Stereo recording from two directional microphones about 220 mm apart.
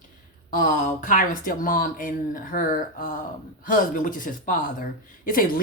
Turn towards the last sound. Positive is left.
turn(degrees=40)  # may be behind; listen again after turning